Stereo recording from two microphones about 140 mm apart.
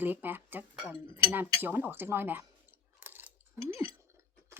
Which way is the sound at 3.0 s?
15° right (ahead or behind).